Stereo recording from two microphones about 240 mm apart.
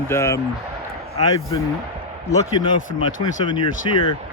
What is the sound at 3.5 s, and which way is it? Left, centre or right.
Speech, centre.